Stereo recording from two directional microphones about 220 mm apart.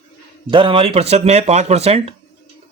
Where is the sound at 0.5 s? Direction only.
25° right (ahead or behind).